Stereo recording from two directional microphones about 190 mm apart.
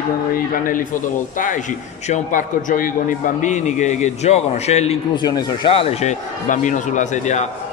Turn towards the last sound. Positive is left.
turn(degrees=40)  # may be behind; listen again after turning